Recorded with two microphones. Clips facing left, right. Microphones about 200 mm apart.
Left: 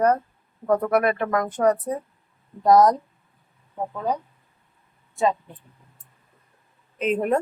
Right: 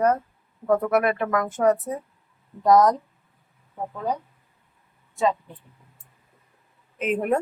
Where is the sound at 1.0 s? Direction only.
40° left (ahead or behind).